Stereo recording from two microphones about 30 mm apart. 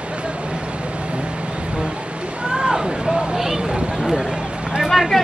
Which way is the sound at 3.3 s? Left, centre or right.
Centre.